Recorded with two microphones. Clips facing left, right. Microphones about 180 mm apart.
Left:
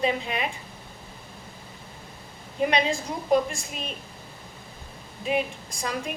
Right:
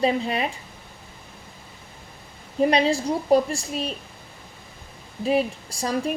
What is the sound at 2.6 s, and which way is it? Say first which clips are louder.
A woman's voice: right 5 dB; 35° right (ahead or behind).